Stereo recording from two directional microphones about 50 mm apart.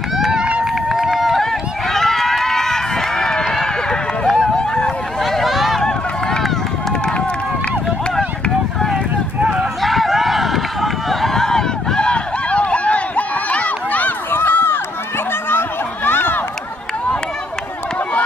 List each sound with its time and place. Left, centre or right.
0.2 s run: centre
0.8 s run: centre
4.6 s vehicle: centre
5.2 s a sound: centre
5.8 s run: centre
9.8 s run: centre
12.1 s run: left
14.3 s run: left
15.5 s a sound: left